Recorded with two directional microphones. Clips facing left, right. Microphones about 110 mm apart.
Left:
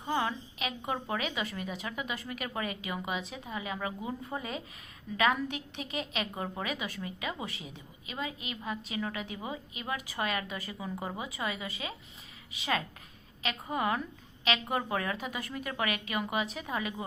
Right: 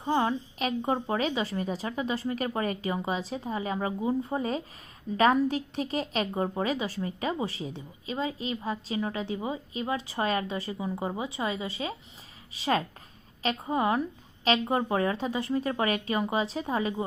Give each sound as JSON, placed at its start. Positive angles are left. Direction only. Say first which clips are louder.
{"t": 0.0, "sound": "a woman's voice", "louder": "right 5 dB", "side_deg": -30}